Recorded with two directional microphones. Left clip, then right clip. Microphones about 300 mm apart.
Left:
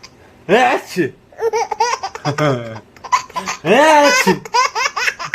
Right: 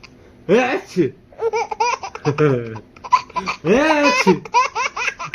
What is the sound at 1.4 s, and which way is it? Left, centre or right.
Laughter, centre.